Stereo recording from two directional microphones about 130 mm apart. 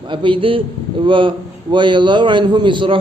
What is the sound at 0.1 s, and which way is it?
A man's voice, 40° right (ahead or behind).